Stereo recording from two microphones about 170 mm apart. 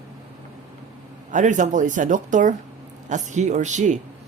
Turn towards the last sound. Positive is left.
turn(degrees=-45)  # may be behind; listen again after turning